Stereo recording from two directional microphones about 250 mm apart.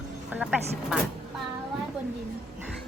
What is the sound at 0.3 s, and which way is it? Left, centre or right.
Speech, centre.